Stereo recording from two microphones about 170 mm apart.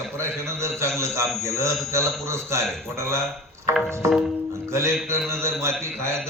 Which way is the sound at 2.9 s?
15° right (ahead or behind).